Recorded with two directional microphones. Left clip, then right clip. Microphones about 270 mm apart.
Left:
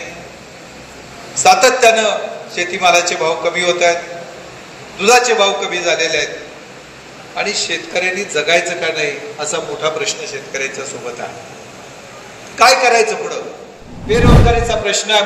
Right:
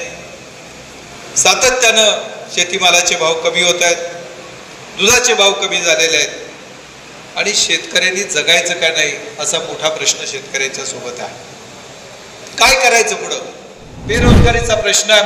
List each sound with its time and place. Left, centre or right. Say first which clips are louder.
1.3 s a man's voice: left 2 dB; right
7.3 s a man's voice: right 4 dB; right
12.5 s a man's voice: even; right